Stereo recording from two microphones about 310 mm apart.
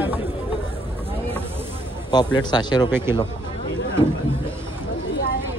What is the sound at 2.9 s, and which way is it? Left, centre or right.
Speech, centre.